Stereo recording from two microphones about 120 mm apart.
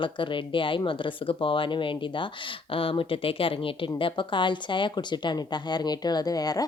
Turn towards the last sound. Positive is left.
turn(degrees=30)  # may be behind; listen again after turning